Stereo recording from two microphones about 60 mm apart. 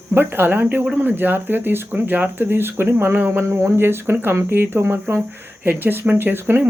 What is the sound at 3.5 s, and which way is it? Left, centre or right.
Speech, right.